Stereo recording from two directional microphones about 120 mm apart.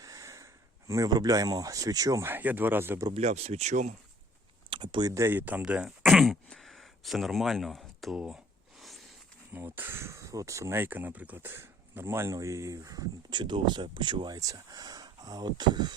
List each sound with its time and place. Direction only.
0.0 s speech: 30° right (ahead or behind)
3.1 s speech: 65° right (ahead or behind)
4.7 s a sound: 45° right (ahead or behind)
5.1 s speech: 20° right (ahead or behind); by 8.4 s 5° right (ahead or behind)
8.8 s a sound: centre (ahead or behind)
9.5 s speech: 15° right (ahead or behind); by 14.3 s 40° right (ahead or behind)
14.3 s speech: 30° right (ahead or behind)